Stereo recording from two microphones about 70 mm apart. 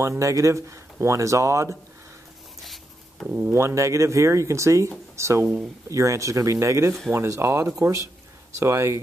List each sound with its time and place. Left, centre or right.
0.0 s speech: right
2.6 s a sound: centre
3.3 s speech: right
3.5 s speech: right